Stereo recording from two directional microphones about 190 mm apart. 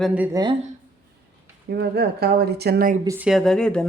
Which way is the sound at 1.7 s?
55° right (ahead or behind).